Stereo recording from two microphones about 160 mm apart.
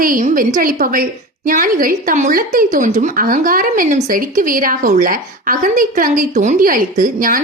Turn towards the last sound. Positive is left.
turn(degrees=-55)  # may be behind; listen again after turning